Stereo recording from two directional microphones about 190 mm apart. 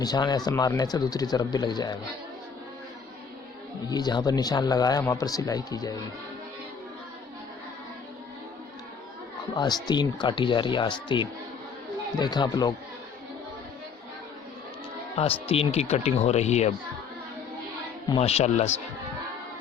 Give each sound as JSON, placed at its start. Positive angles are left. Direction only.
{"t": 0.0, "sound": "speech", "side_deg": 20}
{"t": 3.8, "sound": "speech", "side_deg": 20}
{"t": 9.6, "sound": "speech", "side_deg": 20}
{"t": 15.1, "sound": "speech", "side_deg": 30}
{"t": 18.1, "sound": "speech", "side_deg": 35}